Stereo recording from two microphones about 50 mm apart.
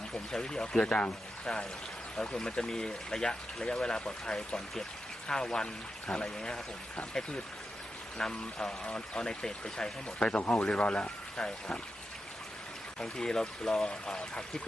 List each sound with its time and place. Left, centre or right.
0.3 s speech: centre
2.2 s speech: centre
10.2 s speech: left
13.0 s speech: centre